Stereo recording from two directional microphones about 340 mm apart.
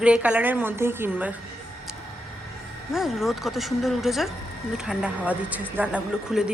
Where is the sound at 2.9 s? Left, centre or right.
Centre.